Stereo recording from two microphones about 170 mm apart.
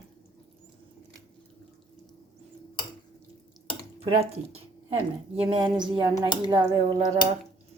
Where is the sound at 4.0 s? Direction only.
35° right (ahead or behind).